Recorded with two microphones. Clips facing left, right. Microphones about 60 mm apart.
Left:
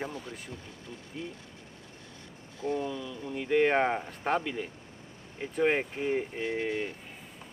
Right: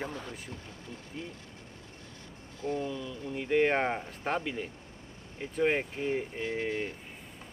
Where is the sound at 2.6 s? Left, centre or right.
Left.